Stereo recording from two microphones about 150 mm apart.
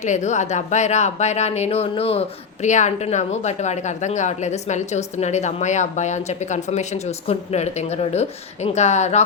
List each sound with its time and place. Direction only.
0.0 s speech: 50° left (ahead or behind)